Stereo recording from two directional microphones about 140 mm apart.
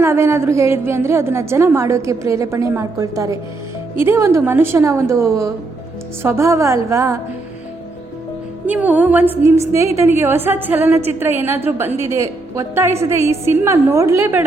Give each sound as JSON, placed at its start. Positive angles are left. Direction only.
{"t": 0.0, "sound": "a woman's voice", "side_deg": -20}
{"t": 8.6, "sound": "a woman's voice", "side_deg": -10}